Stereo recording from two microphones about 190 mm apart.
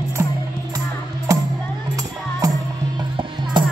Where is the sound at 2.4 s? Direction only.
20° right (ahead or behind).